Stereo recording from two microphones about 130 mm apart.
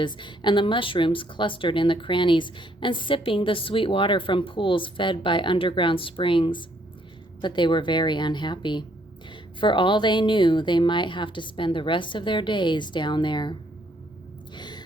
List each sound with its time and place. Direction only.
0.0 s speech: 40° left (ahead or behind)
14.5 s gasp: 35° left (ahead or behind)